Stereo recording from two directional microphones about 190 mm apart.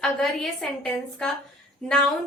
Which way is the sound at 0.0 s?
5° left (ahead or behind).